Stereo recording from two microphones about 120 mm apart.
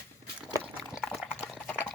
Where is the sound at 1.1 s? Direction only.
Centre (ahead or behind).